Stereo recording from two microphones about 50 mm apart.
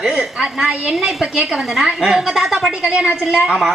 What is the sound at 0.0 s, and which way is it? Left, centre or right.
A woman's voice, centre.